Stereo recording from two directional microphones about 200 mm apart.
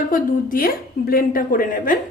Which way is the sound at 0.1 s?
45° left (ahead or behind).